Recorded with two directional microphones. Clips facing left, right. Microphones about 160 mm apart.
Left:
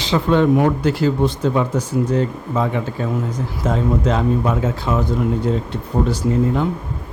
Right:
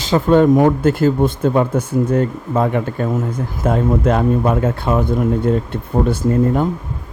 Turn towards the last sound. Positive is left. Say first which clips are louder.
# right 3 dB
turn(degrees=-50)  # may be behind; listen again after turning